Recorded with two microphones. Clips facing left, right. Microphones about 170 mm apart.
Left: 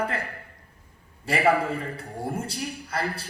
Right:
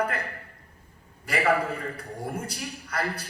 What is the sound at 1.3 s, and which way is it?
Speech, 25° left (ahead or behind).